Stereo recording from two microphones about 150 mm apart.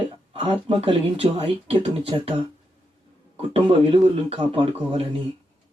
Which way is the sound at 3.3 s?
40° right (ahead or behind).